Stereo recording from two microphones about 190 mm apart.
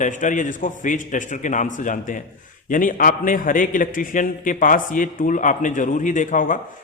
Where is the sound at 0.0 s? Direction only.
40° left (ahead or behind).